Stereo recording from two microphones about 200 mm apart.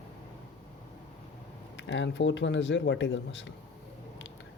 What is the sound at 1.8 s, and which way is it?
Speech, 65° left (ahead or behind).